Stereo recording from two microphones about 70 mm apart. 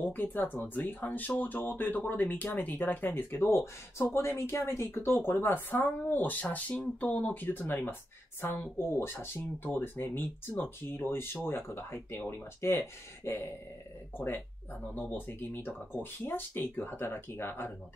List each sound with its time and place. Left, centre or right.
0.0 s speech: left